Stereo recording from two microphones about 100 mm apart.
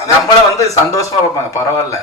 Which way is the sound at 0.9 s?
35° left (ahead or behind).